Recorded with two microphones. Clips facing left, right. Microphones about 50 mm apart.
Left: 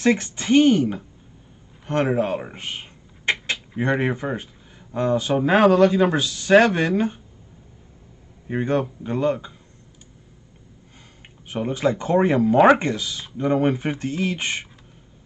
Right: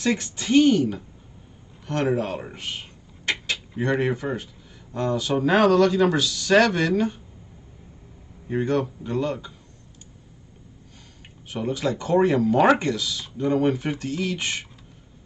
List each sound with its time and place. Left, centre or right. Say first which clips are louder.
0.0 s a woman's voice: left 4 dB; left
8.5 s speech: left 1 dB; left
11.4 s speech: left 3 dB; left